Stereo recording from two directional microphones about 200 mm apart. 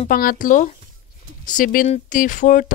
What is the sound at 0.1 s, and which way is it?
Speech, 45° left (ahead or behind).